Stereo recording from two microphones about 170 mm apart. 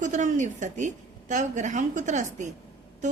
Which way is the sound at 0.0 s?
45° right (ahead or behind).